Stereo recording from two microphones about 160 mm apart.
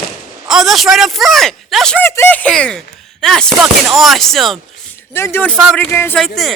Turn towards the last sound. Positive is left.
turn(degrees=0)  # may be behind; listen again after turning